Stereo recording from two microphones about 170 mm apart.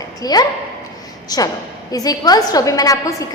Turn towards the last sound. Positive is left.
turn(degrees=20)  # may be behind; listen again after turning